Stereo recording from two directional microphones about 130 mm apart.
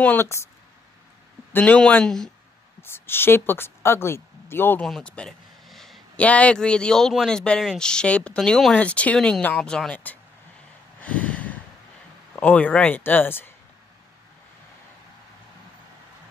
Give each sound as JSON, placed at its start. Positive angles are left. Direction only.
{"t": 0.0, "sound": "speech", "side_deg": 15}
{"t": 1.5, "sound": "speech", "side_deg": 10}
{"t": 2.8, "sound": "speech", "side_deg": 15}
{"t": 4.8, "sound": "speech", "side_deg": 5}
{"t": 11.0, "sound": "a sound", "side_deg": 10}
{"t": 12.4, "sound": "speech", "side_deg": 10}